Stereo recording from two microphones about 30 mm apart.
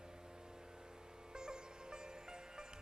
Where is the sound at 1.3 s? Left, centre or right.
Right.